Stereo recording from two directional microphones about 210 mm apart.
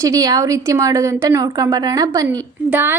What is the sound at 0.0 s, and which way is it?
A woman's voice, 15° right (ahead or behind).